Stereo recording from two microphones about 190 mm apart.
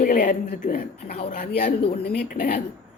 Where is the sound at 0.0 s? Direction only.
50° left (ahead or behind).